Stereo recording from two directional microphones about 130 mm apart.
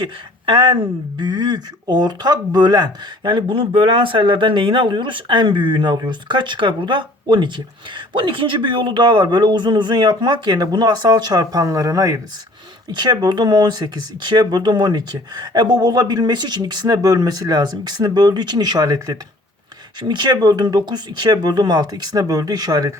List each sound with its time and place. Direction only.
0.0 s speech: 35° right (ahead or behind)